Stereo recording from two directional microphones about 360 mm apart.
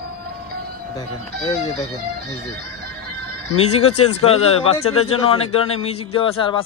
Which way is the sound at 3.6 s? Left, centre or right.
Centre.